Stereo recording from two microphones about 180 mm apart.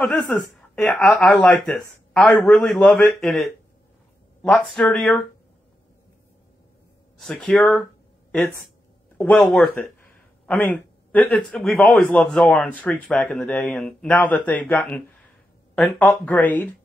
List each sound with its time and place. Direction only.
0.0 s a man's voice: 10° left (ahead or behind)
7.2 s a man's voice: 5° left (ahead or behind)
9.2 s a man's voice: 5° left (ahead or behind)